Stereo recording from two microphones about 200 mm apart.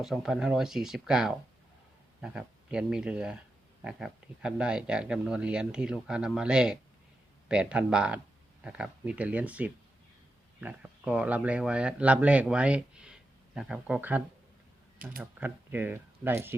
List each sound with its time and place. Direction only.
0.0 s speech: centre (ahead or behind)
15.2 s speech: 10° right (ahead or behind)